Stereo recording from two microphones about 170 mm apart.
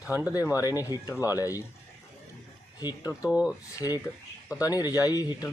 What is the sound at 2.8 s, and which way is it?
Speech, 20° left (ahead or behind).